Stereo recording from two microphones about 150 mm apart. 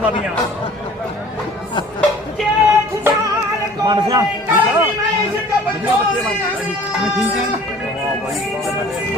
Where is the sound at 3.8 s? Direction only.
25° right (ahead or behind).